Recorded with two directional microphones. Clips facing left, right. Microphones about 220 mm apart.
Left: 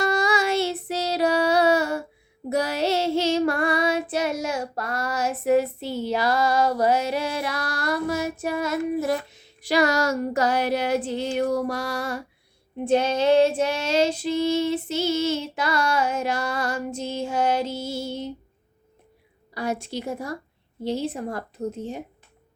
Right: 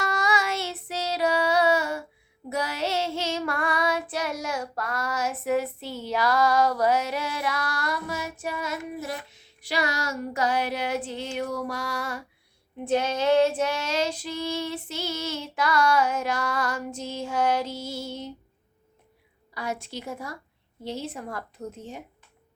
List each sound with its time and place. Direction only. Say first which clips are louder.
0.0 s female singing: left 5 dB; 30° left (ahead or behind)
2.5 s child singing: left 5 dB; 35° left (ahead or behind)
12.8 s female singing: left 4 dB; 30° left (ahead or behind)
19.5 s child singing: left 5 dB; 35° left (ahead or behind)